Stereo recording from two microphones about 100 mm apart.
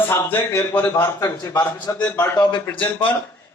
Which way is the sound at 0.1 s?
20° left (ahead or behind).